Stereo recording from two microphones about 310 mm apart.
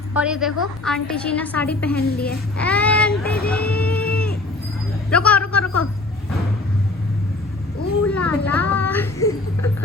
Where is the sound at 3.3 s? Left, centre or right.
Left.